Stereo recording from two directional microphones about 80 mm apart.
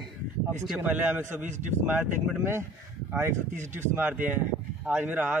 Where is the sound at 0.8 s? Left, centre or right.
Right.